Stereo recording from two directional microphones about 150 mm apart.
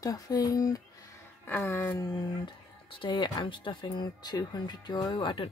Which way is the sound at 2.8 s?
35° left (ahead or behind).